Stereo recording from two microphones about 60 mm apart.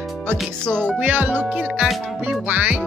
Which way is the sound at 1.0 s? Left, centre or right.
Right.